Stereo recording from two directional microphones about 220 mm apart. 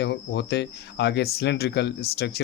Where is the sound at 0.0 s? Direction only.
50° left (ahead or behind).